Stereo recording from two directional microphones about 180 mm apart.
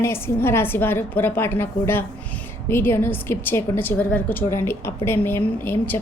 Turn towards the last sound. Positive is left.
turn(degrees=10)  # may be behind; listen again after turning